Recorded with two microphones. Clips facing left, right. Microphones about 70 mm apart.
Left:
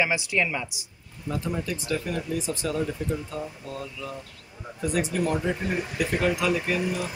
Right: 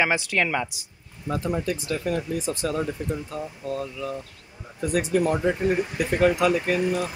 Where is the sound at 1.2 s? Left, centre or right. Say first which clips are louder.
Right 4 dB; right.